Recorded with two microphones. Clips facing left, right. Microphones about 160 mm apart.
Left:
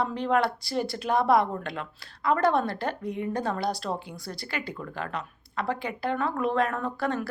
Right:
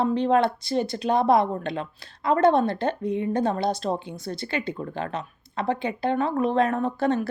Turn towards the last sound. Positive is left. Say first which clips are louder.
# right 5 dB
turn(degrees=-20)  # may be behind; listen again after turning